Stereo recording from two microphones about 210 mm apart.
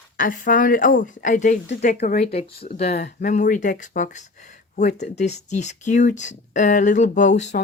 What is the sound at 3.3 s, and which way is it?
Speech, 35° left (ahead or behind).